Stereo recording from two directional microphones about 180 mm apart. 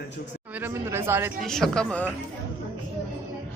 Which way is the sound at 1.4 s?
Centre (ahead or behind).